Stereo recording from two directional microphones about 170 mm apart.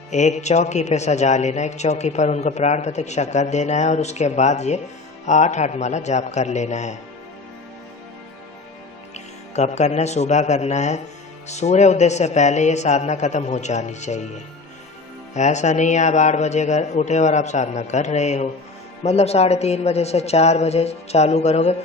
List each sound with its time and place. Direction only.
0.1 s a man's voice: 45° left (ahead or behind)
9.1 s a man's voice: 40° left (ahead or behind)